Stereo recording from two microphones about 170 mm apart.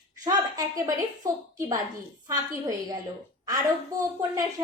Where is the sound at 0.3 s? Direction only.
20° right (ahead or behind).